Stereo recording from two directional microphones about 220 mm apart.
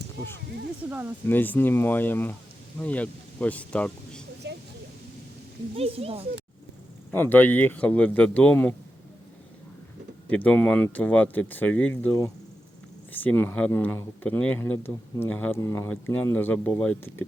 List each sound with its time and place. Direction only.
0.9 s speech: 10° right (ahead or behind)
1.3 s speech: 10° left (ahead or behind)
4.4 s a sound: 50° right (ahead or behind)
5.7 s speech: 25° right (ahead or behind)
7.1 s speech: 10° left (ahead or behind)
10.2 s speech: 5° left (ahead or behind)